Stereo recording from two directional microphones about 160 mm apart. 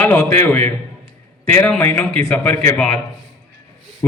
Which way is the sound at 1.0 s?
15° left (ahead or behind).